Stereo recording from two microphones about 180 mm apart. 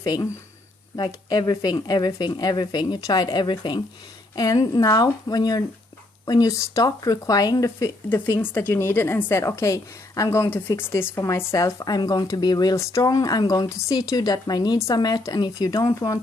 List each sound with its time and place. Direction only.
0.0 s speech: 20° left (ahead or behind)